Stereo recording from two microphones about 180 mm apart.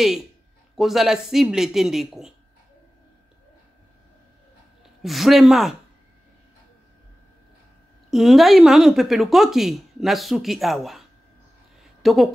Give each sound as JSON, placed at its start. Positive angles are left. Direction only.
{"t": 0.7, "sound": "speech", "side_deg": 0}
{"t": 5.0, "sound": "speech", "side_deg": 0}
{"t": 8.1, "sound": "a woman's voice", "side_deg": 0}